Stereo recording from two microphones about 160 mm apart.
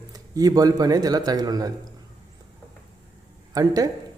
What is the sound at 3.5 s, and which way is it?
Speech, 20° right (ahead or behind).